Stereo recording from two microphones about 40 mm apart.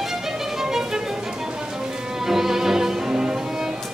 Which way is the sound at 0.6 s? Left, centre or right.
Centre.